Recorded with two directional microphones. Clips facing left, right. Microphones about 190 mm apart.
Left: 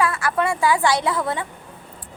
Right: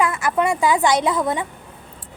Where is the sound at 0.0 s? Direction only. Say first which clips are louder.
Right 2 dB; 20° right (ahead or behind).